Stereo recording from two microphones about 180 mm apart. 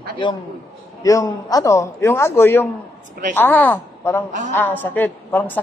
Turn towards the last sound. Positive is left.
turn(degrees=10)  # may be behind; listen again after turning